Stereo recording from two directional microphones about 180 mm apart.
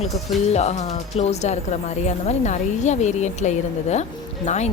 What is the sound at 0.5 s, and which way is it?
Speech, 40° left (ahead or behind).